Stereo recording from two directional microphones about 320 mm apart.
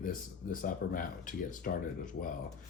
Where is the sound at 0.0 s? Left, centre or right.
Left.